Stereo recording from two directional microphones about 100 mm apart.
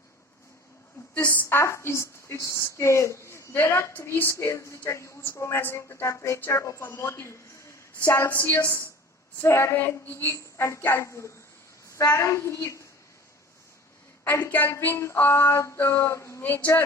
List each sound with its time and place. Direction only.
1.1 s a woman's voice: 15° left (ahead or behind); by 12.9 s 30° left (ahead or behind)
14.3 s a woman's voice: 20° left (ahead or behind)
16.4 s a woman's voice: 15° left (ahead or behind)